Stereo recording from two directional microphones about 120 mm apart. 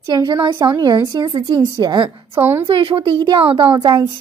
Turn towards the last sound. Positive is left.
turn(degrees=-35)  # may be behind; listen again after turning